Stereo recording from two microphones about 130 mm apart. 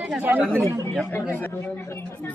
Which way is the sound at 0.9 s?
10° left (ahead or behind).